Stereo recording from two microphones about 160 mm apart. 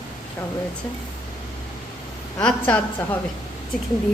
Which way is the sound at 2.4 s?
10° left (ahead or behind).